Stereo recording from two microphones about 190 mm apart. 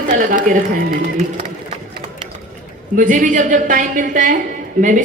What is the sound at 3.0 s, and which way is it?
A woman's voice, 45° right (ahead or behind).